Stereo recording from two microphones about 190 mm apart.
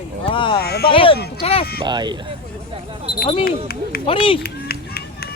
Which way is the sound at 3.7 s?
55° left (ahead or behind).